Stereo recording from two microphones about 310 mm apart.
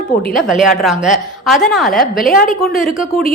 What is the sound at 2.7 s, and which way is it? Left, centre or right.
Speech, centre.